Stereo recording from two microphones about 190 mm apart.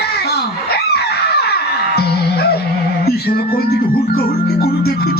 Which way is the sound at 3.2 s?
55° left (ahead or behind).